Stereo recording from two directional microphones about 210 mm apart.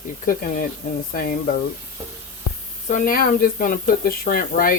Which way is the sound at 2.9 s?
40° left (ahead or behind).